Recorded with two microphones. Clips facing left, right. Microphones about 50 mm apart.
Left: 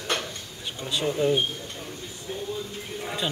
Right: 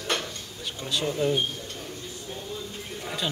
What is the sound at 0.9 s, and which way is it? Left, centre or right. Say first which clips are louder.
Speech: left 2 dB; centre.